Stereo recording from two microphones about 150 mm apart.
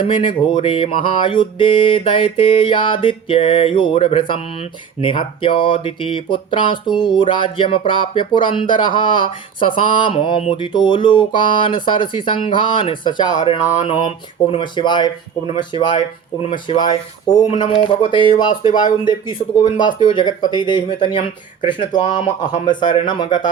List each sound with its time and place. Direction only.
0.0 s speech: 35° left (ahead or behind)
20.0 s speech: 35° left (ahead or behind)